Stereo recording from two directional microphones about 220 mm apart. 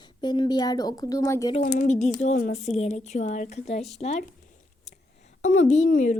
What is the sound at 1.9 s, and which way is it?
A woman's voice, 30° left (ahead or behind).